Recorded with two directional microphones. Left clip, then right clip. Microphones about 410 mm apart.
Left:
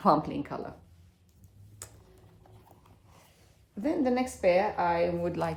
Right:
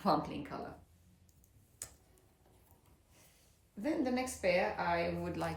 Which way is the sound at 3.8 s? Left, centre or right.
Centre.